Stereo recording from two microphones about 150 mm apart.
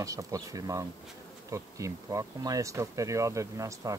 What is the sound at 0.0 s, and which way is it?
Speech, 20° right (ahead or behind).